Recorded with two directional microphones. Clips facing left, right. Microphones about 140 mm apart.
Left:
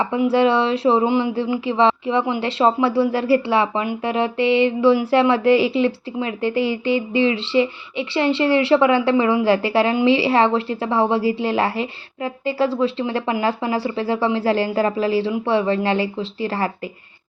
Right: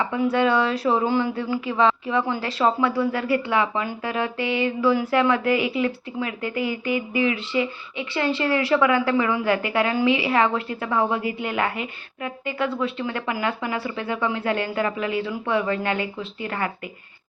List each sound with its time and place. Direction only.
0.3 s speech: 30° left (ahead or behind)